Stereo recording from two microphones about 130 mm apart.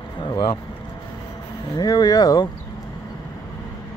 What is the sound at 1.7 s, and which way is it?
Speech, 30° left (ahead or behind).